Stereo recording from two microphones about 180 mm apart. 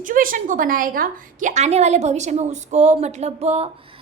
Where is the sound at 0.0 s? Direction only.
50° right (ahead or behind).